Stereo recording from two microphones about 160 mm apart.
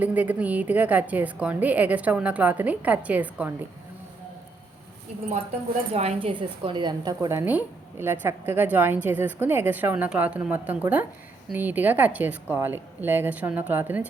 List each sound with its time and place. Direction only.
0.0 s a woman's voice: 10° right (ahead or behind)
5.9 s a woman's voice: 40° right (ahead or behind); by 14.1 s 10° right (ahead or behind)